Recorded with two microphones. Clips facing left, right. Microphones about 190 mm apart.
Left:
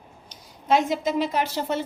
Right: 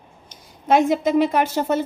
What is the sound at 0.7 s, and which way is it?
A woman's voice, 55° right (ahead or behind).